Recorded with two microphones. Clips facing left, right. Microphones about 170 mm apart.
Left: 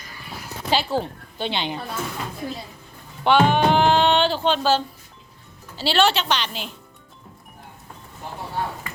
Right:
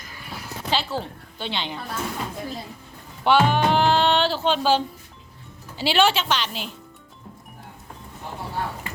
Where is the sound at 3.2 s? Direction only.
5° right (ahead or behind).